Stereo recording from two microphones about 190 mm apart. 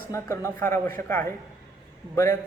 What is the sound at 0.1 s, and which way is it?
Speech, 15° left (ahead or behind).